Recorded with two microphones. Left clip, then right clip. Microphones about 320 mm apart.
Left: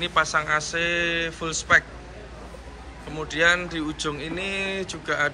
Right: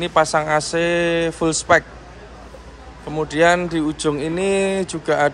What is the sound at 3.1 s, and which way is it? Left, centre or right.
Speech, right.